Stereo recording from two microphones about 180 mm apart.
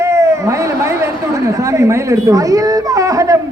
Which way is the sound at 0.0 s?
15° right (ahead or behind).